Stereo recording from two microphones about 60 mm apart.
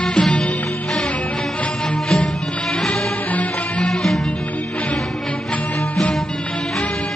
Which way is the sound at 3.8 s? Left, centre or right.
Centre.